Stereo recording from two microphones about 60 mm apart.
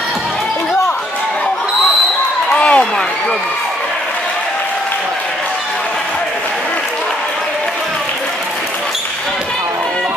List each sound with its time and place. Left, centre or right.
2.5 s run: centre